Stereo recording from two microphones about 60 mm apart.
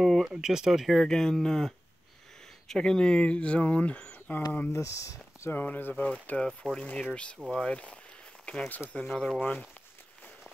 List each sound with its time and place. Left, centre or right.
0.0 s a sound: centre
0.3 s speech: centre
1.0 s speech: centre
2.7 s speech: centre
4.3 s speech: left
4.7 s speech: left
5.5 s speech: left
6.6 s speech: centre
7.4 s speech: right
7.7 s speech: left
9.0 s speech: centre